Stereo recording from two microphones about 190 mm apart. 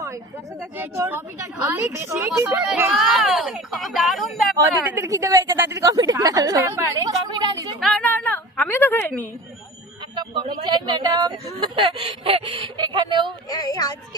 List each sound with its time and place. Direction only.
0.8 s a woman's voice: 10° right (ahead or behind)
4.5 s speech: 15° right (ahead or behind)
7.8 s a woman's voice: centre (ahead or behind)
10.7 s speech: 20° right (ahead or behind)
13.5 s speech: 20° left (ahead or behind)